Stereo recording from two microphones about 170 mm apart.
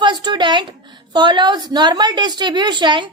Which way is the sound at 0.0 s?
25° right (ahead or behind).